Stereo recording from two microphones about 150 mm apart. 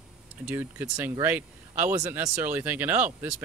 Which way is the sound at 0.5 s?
15° right (ahead or behind).